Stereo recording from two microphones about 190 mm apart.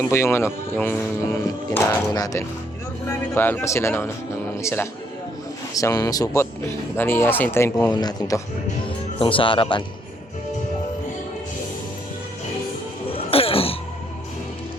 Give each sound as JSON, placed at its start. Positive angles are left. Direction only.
{"t": 0.1, "sound": "speech", "side_deg": 15}
{"t": 13.1, "sound": "throat clearing", "side_deg": 30}